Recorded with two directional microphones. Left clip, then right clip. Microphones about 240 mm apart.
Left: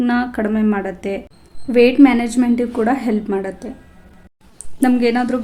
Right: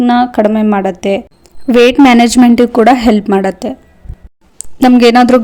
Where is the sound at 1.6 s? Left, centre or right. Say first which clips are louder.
Right 6 dB; right.